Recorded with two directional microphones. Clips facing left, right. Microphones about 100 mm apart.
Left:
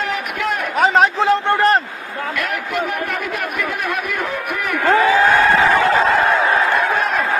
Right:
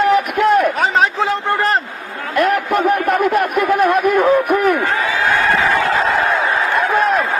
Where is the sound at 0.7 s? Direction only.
Centre (ahead or behind).